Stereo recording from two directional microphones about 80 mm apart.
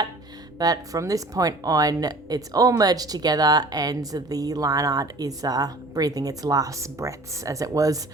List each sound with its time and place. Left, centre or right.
0.6 s speech: right